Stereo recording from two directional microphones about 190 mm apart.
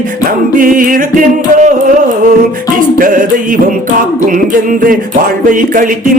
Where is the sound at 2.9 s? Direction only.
45° right (ahead or behind).